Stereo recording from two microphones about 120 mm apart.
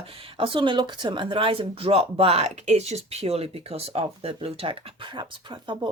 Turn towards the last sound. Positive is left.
turn(degrees=-40)  # may be behind; listen again after turning